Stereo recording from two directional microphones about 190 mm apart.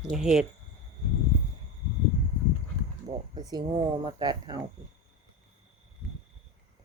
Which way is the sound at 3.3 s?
20° right (ahead or behind).